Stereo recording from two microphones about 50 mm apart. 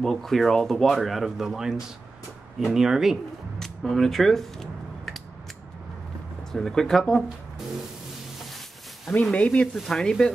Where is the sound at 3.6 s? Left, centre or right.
Centre.